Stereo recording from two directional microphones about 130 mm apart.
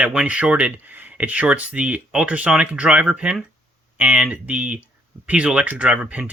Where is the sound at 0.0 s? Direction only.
10° right (ahead or behind).